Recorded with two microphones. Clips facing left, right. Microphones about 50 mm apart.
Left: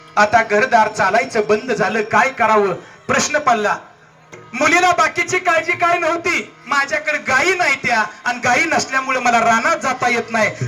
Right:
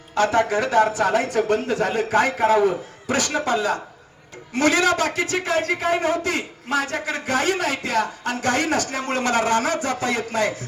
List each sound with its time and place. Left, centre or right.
0.1 s a man's voice: left